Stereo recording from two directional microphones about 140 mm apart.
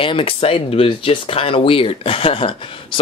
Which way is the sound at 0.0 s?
40° left (ahead or behind).